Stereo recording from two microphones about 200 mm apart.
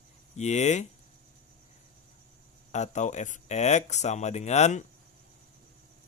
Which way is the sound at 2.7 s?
35° left (ahead or behind).